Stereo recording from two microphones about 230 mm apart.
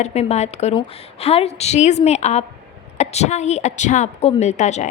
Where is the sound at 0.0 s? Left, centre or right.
Left.